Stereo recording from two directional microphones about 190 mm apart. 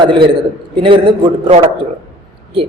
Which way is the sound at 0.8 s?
30° right (ahead or behind).